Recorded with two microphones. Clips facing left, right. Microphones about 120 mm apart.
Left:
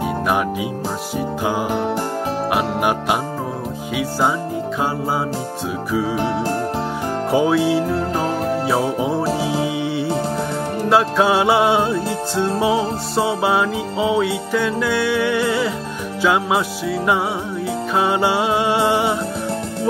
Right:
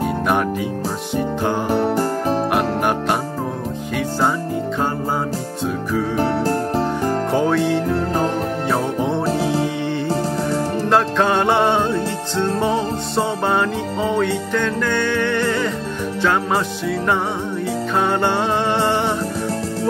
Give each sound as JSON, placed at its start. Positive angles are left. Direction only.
{"t": 1.1, "sound": "music", "side_deg": 5}
{"t": 1.7, "sound": "music", "side_deg": -40}
{"t": 2.5, "sound": "music", "side_deg": 5}
{"t": 7.2, "sound": "music", "side_deg": 5}